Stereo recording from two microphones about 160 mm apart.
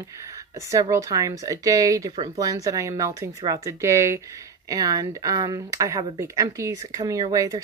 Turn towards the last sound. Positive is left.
turn(degrees=-20)  # may be behind; listen again after turning